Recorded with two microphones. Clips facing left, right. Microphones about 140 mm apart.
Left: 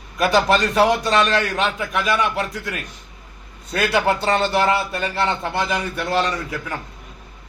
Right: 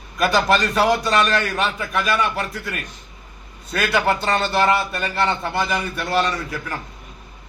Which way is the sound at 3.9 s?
25° left (ahead or behind).